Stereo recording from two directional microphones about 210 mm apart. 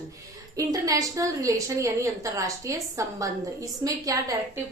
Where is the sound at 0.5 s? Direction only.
15° right (ahead or behind).